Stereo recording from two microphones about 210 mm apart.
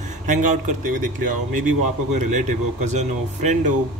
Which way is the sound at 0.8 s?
40° right (ahead or behind).